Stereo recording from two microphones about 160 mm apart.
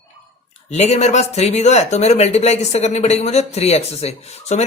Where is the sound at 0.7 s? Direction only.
45° left (ahead or behind).